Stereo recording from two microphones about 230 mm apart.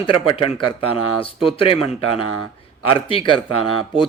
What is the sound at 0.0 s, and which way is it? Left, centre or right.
Speech, left.